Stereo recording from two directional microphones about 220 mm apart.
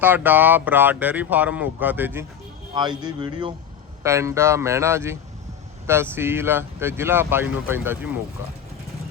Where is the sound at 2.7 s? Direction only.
20° right (ahead or behind).